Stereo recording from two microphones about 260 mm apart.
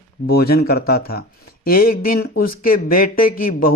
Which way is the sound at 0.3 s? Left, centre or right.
Left.